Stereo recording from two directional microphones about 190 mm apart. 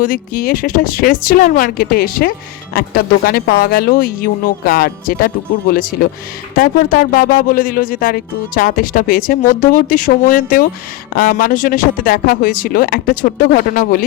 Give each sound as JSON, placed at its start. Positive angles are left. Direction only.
{"t": 0.0, "sound": "speech", "side_deg": 45}